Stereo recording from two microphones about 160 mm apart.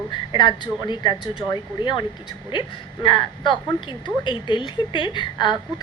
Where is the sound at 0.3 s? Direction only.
30° left (ahead or behind).